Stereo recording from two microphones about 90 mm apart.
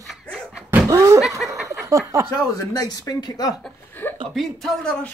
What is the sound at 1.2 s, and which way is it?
Snicker, centre (ahead or behind).